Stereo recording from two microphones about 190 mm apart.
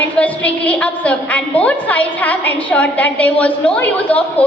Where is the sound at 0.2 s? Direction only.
5° left (ahead or behind).